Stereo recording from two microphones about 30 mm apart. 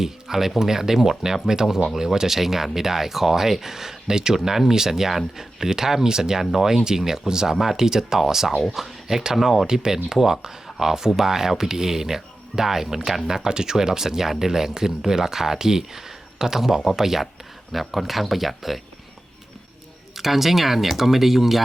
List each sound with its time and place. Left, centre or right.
0.0 s speech: centre
4.4 s speech: centre
6.4 s speech: centre
7.5 s speech: centre
7.8 s speech: centre
9.6 s speech: right; by 18.8 s centre
20.1 s speech: centre